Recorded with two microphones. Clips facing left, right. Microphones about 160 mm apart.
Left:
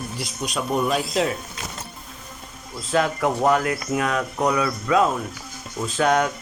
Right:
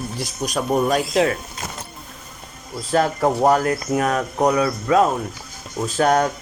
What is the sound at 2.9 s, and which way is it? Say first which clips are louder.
Speech: right 3 dB; 35° right (ahead or behind).